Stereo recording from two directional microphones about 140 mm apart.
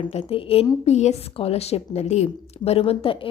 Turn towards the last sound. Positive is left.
turn(degrees=40)  # may be behind; listen again after turning